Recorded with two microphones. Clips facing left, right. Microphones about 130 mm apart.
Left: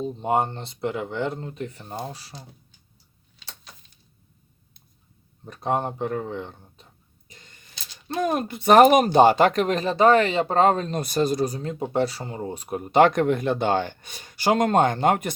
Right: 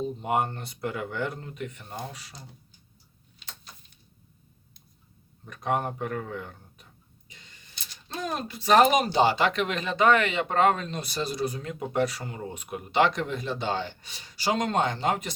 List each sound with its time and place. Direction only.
0.2 s speech: 30° left (ahead or behind)
5.5 s speech: 30° left (ahead or behind)
7.3 s a sound: 45° left (ahead or behind)
8.0 s speech: 55° left (ahead or behind)